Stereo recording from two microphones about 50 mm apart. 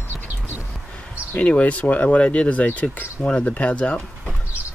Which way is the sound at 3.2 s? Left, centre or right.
Left.